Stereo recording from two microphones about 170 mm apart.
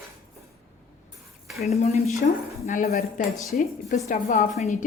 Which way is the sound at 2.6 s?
55° left (ahead or behind).